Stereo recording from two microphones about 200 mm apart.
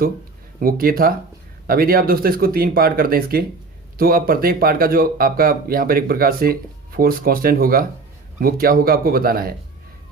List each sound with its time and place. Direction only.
0.6 s speech: 45° right (ahead or behind)